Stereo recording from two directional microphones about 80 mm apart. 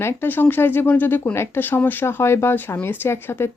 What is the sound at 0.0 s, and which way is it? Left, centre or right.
A woman's voice, left.